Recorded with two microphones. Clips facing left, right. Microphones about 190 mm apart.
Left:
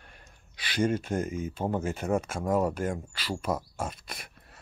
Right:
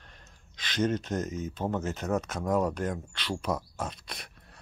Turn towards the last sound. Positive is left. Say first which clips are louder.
# even
turn(degrees=5)  # may be behind; listen again after turning